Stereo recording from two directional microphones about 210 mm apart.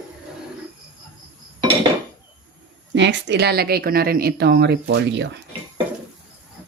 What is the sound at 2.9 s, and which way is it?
A woman's voice, 55° right (ahead or behind).